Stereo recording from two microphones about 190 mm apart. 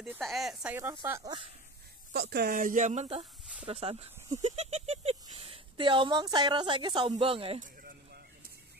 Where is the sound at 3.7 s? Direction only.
30° right (ahead or behind).